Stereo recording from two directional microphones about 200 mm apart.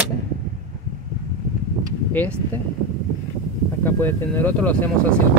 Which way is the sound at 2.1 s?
10° left (ahead or behind).